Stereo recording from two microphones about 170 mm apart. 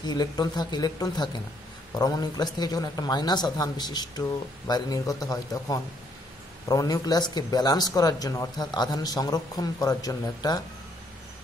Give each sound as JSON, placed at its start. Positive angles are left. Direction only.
{"t": 0.0, "sound": "speech", "side_deg": 25}